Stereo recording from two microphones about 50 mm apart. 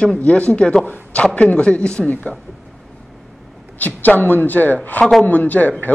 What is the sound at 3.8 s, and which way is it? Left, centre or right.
A woman's voice, left.